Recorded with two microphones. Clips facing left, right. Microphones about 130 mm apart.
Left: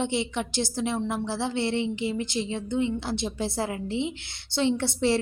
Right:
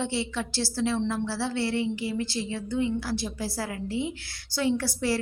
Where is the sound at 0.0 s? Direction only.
20° left (ahead or behind).